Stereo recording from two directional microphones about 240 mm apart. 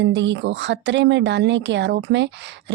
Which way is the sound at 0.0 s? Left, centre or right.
Right.